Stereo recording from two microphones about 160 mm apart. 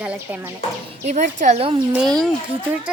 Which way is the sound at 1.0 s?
50° right (ahead or behind).